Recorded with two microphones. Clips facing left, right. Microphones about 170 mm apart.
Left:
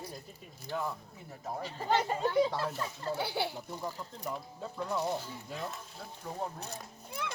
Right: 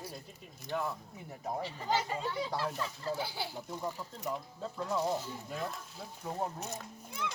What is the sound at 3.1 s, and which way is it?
Speech, 65° left (ahead or behind).